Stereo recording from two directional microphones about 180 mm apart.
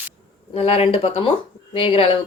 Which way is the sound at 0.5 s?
35° left (ahead or behind).